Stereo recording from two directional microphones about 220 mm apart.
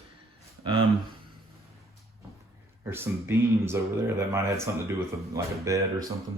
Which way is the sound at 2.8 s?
10° right (ahead or behind).